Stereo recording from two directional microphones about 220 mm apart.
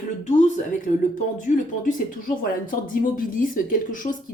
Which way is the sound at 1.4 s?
35° left (ahead or behind).